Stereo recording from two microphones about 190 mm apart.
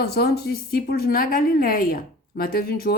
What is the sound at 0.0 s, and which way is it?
A woman's voice, 55° left (ahead or behind).